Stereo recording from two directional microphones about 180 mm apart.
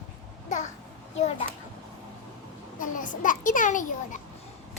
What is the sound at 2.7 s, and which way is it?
A child's voice, 45° left (ahead or behind).